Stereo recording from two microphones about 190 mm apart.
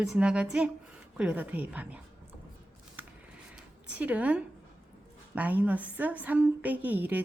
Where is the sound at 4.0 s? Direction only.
10° right (ahead or behind).